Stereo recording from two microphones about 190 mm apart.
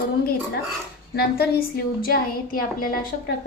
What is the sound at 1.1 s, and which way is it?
A woman's voice, 55° left (ahead or behind).